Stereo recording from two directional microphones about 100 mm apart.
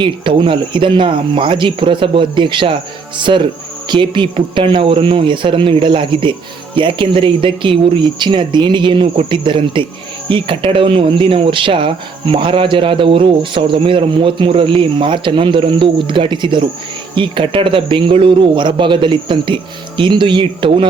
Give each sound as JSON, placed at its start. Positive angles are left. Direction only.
{"t": 0.0, "sound": "speech", "side_deg": -55}